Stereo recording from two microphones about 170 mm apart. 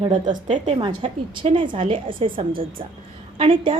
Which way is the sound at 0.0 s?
30° right (ahead or behind).